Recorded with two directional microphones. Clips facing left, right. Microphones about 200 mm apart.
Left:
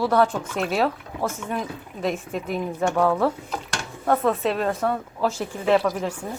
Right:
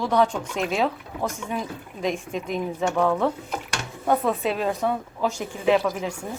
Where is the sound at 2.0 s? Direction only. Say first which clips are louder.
Left 1 dB; 5° left (ahead or behind).